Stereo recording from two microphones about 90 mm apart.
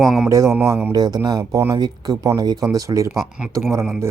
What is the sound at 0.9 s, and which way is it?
Speech, 45° right (ahead or behind).